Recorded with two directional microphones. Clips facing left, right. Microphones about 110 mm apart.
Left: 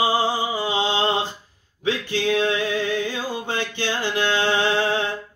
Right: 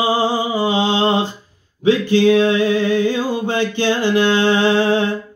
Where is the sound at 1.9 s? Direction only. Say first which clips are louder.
Right 10 dB; 25° right (ahead or behind).